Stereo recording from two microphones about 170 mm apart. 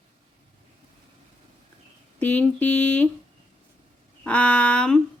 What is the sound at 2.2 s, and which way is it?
Speech, 10° left (ahead or behind).